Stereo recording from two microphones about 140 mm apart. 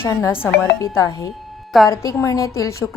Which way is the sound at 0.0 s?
20° left (ahead or behind).